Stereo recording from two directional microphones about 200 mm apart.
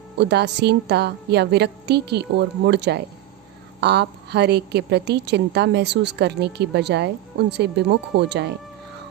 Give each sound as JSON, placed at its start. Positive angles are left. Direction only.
{"t": 0.2, "sound": "a woman's voice", "side_deg": -55}